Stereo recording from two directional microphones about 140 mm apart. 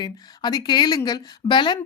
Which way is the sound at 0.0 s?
30° left (ahead or behind).